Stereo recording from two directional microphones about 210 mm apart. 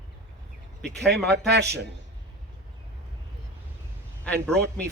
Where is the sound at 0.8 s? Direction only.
55° right (ahead or behind).